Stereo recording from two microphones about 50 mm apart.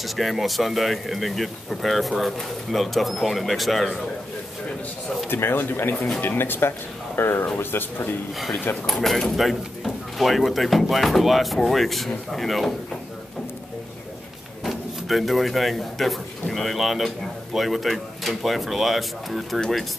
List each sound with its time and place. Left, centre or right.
0.0 s speech: centre
5.3 s speech: left
5.9 s speech: centre
6.2 s speech: left
8.8 s speech: centre
14.6 s speech: centre